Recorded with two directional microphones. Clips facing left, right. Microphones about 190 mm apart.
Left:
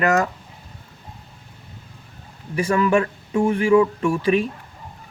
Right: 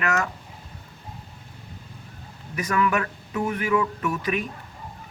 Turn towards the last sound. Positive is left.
turn(degrees=30)  # may be behind; listen again after turning